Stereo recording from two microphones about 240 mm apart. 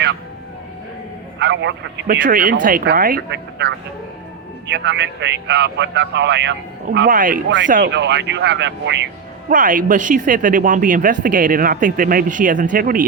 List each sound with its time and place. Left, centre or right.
1.4 s a man's voice: right
9.5 s speech: right